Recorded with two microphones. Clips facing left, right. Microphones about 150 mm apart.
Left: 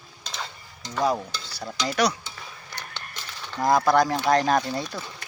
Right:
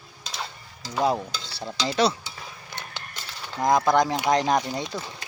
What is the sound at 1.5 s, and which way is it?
Speech, 25° right (ahead or behind).